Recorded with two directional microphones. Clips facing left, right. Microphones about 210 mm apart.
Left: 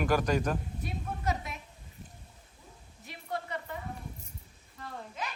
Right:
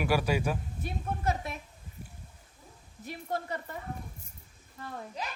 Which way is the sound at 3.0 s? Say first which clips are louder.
Right 3 dB; 45° right (ahead or behind).